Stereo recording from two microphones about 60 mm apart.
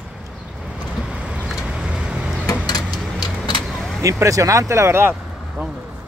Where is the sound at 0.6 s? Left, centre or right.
Centre.